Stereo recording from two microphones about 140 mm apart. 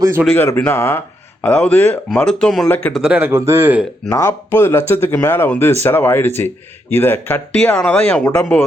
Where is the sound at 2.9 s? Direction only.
5° right (ahead or behind).